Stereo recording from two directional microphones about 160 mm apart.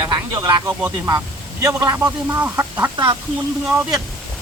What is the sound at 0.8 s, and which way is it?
A man's voice, 15° right (ahead or behind).